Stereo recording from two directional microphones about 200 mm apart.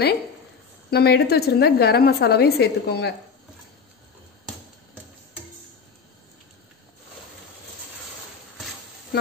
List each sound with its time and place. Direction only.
0.8 s a woman's voice: 50° left (ahead or behind)